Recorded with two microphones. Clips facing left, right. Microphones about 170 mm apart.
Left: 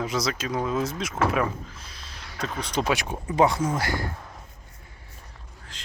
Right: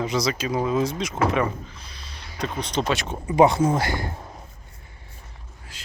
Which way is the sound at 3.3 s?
20° right (ahead or behind).